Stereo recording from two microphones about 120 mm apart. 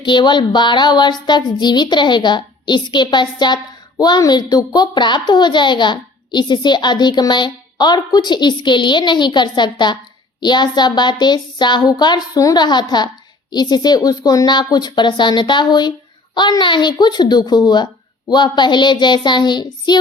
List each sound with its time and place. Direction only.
0.0 s a woman's voice: 40° left (ahead or behind)